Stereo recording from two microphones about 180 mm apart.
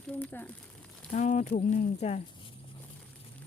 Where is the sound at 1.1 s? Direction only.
40° left (ahead or behind).